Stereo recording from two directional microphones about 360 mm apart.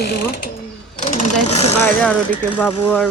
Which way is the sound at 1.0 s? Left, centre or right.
Centre.